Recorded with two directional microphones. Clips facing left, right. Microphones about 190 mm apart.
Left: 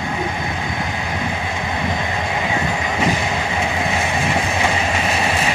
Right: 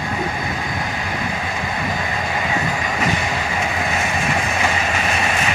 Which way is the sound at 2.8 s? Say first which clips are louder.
Left 2 dB; 20° left (ahead or behind).